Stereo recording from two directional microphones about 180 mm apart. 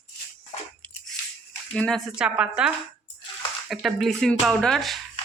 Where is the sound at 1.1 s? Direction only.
5° left (ahead or behind).